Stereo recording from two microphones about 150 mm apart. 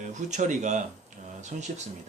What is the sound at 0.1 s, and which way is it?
Speech, 55° right (ahead or behind).